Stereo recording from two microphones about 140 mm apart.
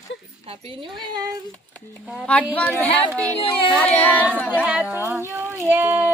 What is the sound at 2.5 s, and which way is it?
Speech, 10° left (ahead or behind).